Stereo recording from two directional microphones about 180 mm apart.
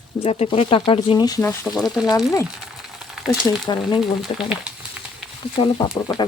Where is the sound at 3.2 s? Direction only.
Centre (ahead or behind).